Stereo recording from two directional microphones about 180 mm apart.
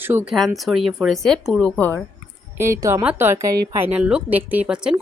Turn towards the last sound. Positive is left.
turn(degrees=-5)  # may be behind; listen again after turning